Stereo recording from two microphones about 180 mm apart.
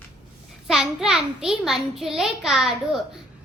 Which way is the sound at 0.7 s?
5° right (ahead or behind).